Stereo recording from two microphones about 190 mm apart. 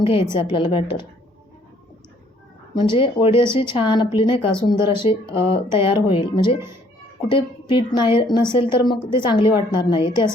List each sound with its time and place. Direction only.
0.0 s a woman's voice: 30° left (ahead or behind)
3.0 s a woman's voice: 25° left (ahead or behind)